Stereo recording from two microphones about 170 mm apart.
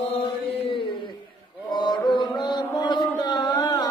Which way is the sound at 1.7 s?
25° left (ahead or behind).